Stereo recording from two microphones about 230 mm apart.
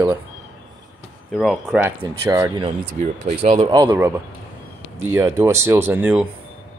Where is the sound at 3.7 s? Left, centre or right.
Centre.